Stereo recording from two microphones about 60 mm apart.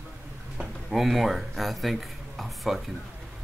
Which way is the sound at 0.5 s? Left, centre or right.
Centre.